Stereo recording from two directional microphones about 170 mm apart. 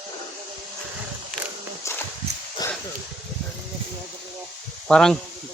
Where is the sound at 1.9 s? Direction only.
15° left (ahead or behind).